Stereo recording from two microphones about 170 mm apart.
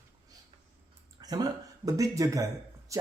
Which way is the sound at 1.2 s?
20° right (ahead or behind).